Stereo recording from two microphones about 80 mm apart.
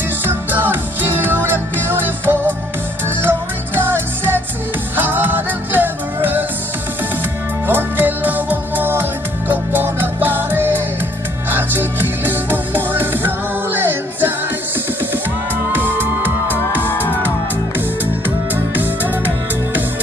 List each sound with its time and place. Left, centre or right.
0.2 s music: right
7.6 s music: right
17.7 s music: right